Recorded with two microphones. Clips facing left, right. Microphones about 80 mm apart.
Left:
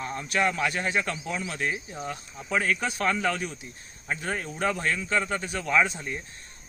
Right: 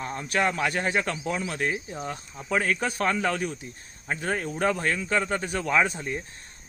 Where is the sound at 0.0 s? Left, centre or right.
Right.